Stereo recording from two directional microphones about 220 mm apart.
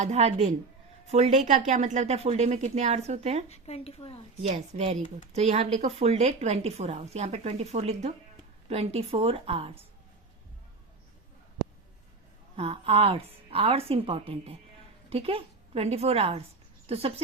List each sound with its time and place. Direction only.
0.0 s a woman's voice: 30° right (ahead or behind)
3.5 s a woman's voice: 30° left (ahead or behind)
4.4 s a woman's voice: 30° right (ahead or behind)
12.5 s a woman's voice: 25° right (ahead or behind)